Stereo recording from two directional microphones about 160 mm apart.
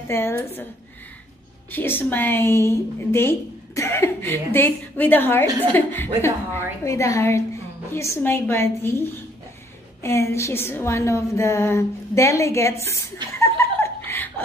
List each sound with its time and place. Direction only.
0.1 s a woman's voice: 15° left (ahead or behind)
1.7 s a woman's voice: 15° left (ahead or behind)
10.0 s a woman's voice: 15° left (ahead or behind)